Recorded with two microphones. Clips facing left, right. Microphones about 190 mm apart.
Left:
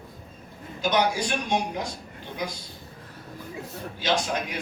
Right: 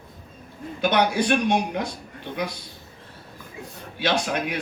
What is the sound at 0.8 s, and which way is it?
A man's voice, 60° right (ahead or behind).